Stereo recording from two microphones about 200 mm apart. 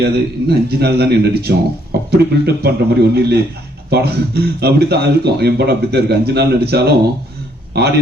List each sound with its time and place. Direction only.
0.0 s a man's voice: 55° right (ahead or behind)